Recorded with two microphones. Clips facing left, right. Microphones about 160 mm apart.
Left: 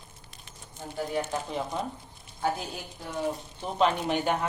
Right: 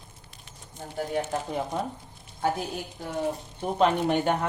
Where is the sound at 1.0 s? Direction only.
45° right (ahead or behind).